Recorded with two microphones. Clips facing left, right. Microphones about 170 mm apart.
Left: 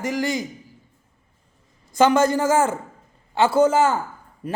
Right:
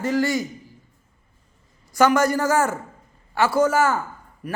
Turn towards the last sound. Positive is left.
turn(degrees=25)  # may be behind; listen again after turning